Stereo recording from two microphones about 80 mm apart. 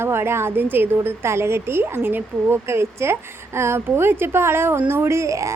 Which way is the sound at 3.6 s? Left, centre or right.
Right.